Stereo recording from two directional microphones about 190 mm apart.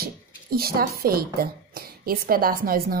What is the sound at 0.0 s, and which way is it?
Speech, 55° right (ahead or behind).